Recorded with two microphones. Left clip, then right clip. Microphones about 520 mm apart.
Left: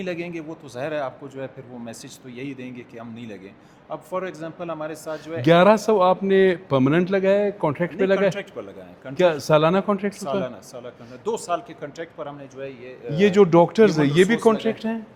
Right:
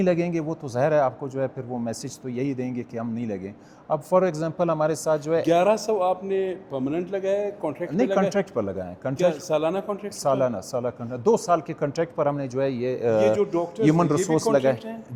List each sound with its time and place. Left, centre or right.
0.0 s a man's voice: right
5.4 s a man's voice: left
8.3 s a man's voice: right
9.1 s a man's voice: left
10.2 s a man's voice: right
13.1 s speech: left
14.4 s a man's voice: left